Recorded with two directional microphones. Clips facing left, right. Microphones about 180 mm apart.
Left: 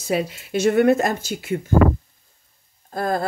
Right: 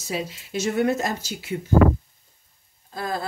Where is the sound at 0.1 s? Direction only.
60° left (ahead or behind).